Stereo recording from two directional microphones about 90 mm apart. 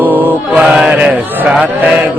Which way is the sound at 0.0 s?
20° right (ahead or behind).